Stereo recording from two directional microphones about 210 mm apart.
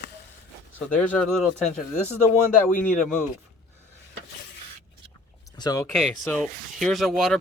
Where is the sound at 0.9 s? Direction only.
5° left (ahead or behind).